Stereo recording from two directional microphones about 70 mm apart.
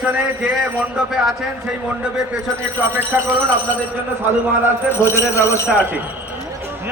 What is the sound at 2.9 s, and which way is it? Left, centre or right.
Speech, right.